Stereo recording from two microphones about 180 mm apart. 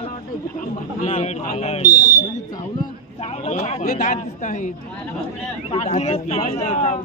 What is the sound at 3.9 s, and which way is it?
Speech, 50° left (ahead or behind).